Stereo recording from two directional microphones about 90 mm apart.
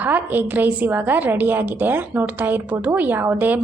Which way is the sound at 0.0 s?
20° right (ahead or behind).